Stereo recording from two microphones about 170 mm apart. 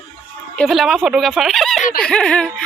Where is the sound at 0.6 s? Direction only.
Centre (ahead or behind).